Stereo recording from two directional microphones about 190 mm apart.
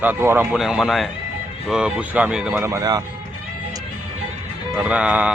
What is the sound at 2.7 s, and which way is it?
Speech, 20° right (ahead or behind).